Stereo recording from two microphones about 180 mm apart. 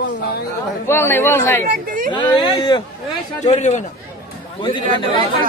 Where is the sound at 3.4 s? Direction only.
40° left (ahead or behind).